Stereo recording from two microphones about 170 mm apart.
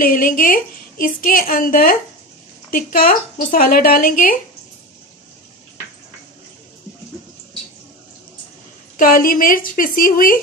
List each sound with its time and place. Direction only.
0.0 s a woman's voice: 55° left (ahead or behind)
8.9 s a woman's voice: 55° left (ahead or behind)